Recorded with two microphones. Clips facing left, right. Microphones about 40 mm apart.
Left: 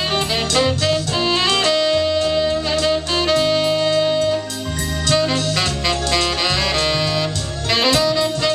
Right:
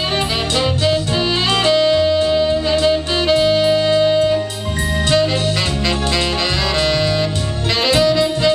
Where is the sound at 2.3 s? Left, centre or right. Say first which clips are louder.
Right 3 dB; centre.